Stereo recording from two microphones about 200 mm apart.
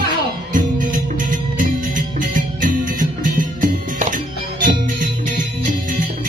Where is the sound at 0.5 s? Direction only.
40° right (ahead or behind).